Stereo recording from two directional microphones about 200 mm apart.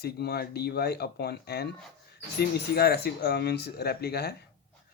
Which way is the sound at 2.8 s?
55° left (ahead or behind).